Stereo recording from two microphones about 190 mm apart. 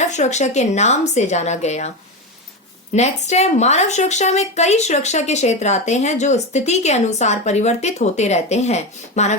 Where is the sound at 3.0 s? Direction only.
35° left (ahead or behind).